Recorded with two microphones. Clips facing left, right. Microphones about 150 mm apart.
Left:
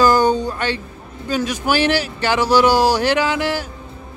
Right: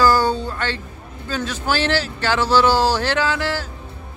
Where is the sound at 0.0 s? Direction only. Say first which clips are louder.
Left 3 dB; 20° left (ahead or behind).